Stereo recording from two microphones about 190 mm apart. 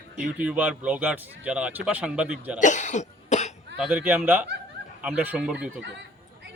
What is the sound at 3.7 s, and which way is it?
Speech, 5° right (ahead or behind).